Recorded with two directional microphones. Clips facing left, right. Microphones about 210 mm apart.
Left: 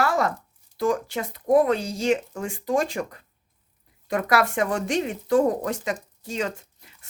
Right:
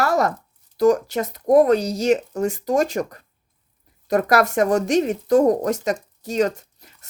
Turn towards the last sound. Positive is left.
turn(degrees=-40)  # may be behind; listen again after turning